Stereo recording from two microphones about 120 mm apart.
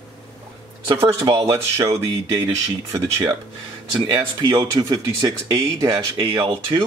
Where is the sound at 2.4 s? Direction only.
20° right (ahead or behind).